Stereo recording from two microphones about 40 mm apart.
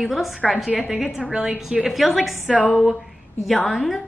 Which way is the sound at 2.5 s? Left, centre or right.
Left.